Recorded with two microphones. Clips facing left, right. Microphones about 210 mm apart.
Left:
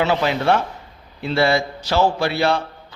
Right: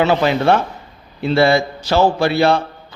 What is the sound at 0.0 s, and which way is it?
A man's voice, 55° right (ahead or behind).